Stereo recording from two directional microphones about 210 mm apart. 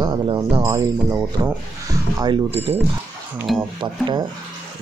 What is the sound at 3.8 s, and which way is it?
Speech, 20° right (ahead or behind).